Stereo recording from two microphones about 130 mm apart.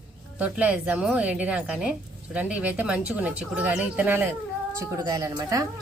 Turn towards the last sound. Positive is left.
turn(degrees=-30)  # may be behind; listen again after turning